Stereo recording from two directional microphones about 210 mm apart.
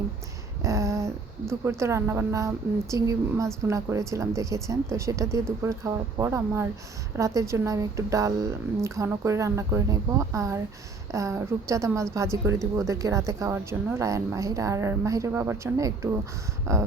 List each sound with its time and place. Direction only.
0.6 s a woman's voice: 15° right (ahead or behind)